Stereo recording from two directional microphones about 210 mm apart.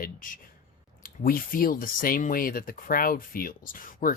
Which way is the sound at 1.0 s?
45° left (ahead or behind).